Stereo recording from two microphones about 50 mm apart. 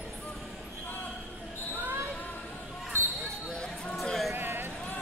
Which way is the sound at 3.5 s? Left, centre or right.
Centre.